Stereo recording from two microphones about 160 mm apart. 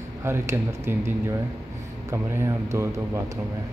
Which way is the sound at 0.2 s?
15° right (ahead or behind).